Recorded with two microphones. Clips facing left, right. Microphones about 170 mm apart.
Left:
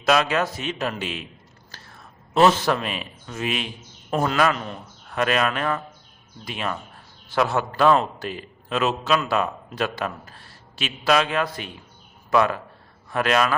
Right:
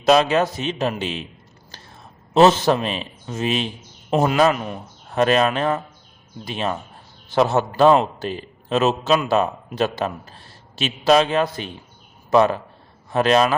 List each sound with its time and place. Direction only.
0.0 s a man's voice: 25° right (ahead or behind)
1.7 s a sound: 20° right (ahead or behind)
4.5 s a man's voice: 10° right (ahead or behind)
5.0 s a man's voice: 30° right (ahead or behind)